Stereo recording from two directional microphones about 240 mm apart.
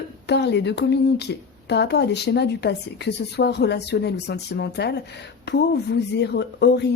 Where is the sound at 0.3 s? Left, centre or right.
Left.